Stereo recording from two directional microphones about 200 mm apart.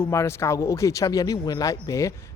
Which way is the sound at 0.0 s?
15° left (ahead or behind).